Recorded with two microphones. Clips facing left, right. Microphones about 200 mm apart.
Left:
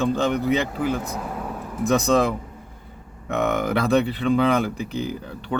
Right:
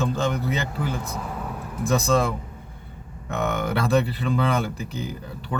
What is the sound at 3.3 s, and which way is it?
Speech, centre (ahead or behind).